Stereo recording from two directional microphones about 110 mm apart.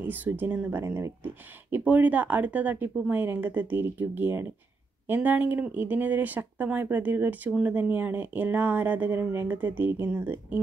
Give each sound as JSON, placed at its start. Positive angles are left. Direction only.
{"t": 0.1, "sound": "speech", "side_deg": -15}